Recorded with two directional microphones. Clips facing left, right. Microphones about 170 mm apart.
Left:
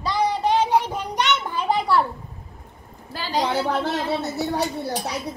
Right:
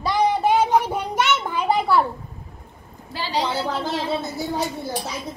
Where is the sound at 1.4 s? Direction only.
10° right (ahead or behind).